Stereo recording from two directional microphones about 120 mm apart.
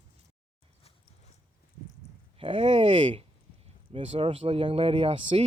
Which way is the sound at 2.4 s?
50° right (ahead or behind).